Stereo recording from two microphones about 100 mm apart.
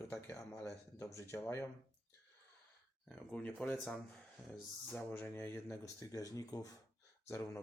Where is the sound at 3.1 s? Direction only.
10° left (ahead or behind).